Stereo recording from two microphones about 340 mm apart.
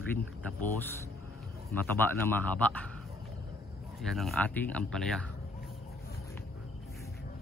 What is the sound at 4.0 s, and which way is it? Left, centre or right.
Speech, centre.